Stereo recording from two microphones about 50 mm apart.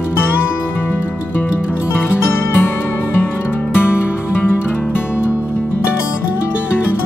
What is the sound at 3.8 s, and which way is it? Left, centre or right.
Music, left.